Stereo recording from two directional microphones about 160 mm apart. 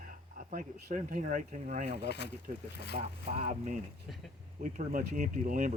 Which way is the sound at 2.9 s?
45° right (ahead or behind).